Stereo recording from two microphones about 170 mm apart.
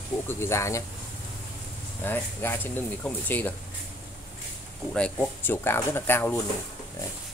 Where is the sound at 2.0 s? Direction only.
15° left (ahead or behind).